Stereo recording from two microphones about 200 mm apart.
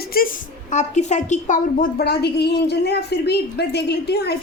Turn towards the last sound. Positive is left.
turn(degrees=55)  # may be behind; listen again after turning